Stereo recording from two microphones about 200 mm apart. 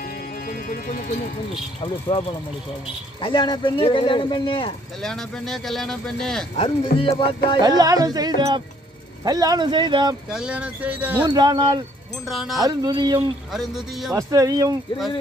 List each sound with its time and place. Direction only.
0.5 s speech: 45° left (ahead or behind)
1.8 s speech: 25° left (ahead or behind)
5.0 s speech: centre (ahead or behind)
6.5 s speech: 30° left (ahead or behind)
7.6 s speech: 20° right (ahead or behind)
10.3 s speech: 5° right (ahead or behind)
11.2 s speech: 20° right (ahead or behind)
12.3 s speech: centre (ahead or behind)
12.6 s speech: 20° right (ahead or behind)
13.5 s speech: centre (ahead or behind)
14.1 s speech: 15° right (ahead or behind)